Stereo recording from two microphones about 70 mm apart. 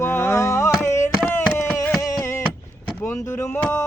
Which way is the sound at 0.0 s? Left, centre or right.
Left.